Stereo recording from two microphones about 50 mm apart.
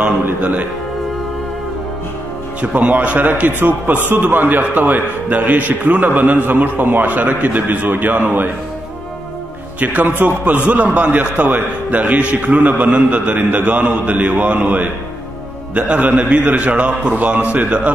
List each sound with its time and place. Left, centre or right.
0.4 s a man's voice: right
2.6 s a man's voice: right
9.8 s a man's voice: right